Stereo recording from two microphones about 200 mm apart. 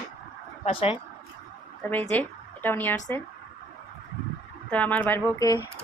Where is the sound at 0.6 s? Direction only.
30° left (ahead or behind).